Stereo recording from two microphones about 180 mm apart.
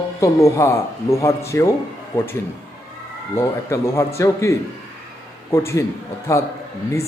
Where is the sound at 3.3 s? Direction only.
15° left (ahead or behind).